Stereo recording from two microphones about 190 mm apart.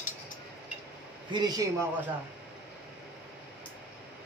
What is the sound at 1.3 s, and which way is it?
Speech, 20° right (ahead or behind).